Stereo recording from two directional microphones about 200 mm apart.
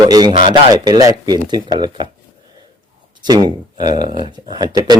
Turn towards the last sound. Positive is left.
turn(degrees=-20)  # may be behind; listen again after turning